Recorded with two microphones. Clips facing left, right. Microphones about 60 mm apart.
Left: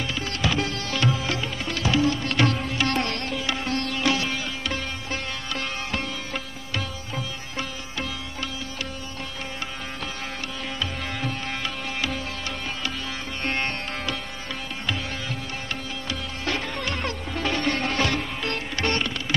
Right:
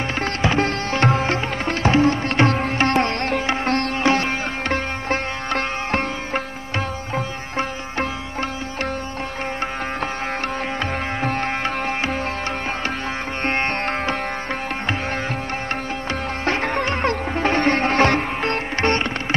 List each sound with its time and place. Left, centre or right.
0.4 s music: right
4.0 s sitar: right
10.8 s music: right
13.4 s music: right
16.1 s music: right